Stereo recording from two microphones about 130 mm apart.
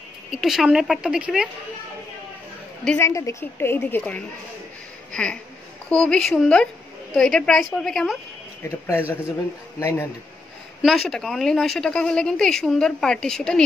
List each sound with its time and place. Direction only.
0.3 s speech: centre (ahead or behind)
3.0 s a woman's voice: 25° left (ahead or behind); by 8.2 s 5° left (ahead or behind)
8.6 s a woman's voice: 20° left (ahead or behind)
10.8 s speech: centre (ahead or behind)